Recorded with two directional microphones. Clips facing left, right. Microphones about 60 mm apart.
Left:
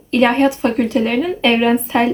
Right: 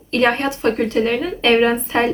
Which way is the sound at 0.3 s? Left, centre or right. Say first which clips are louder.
Left 4 dB; centre.